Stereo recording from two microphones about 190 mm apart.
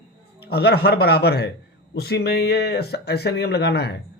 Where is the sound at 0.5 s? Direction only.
55° left (ahead or behind).